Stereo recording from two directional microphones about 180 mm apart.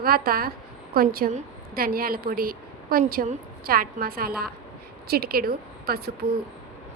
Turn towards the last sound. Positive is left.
turn(degrees=-60)  # may be behind; listen again after turning